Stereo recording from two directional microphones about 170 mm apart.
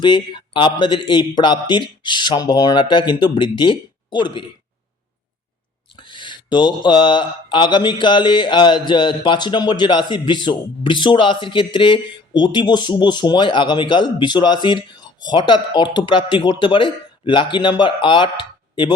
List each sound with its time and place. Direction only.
0.0 s speech: 25° left (ahead or behind)
6.0 s speech: 30° left (ahead or behind)